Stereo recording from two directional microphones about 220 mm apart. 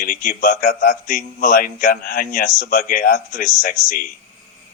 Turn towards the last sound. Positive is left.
turn(degrees=40)  # may be behind; listen again after turning